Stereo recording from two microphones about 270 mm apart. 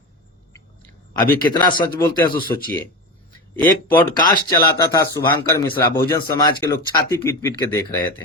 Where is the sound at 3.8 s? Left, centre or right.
Centre.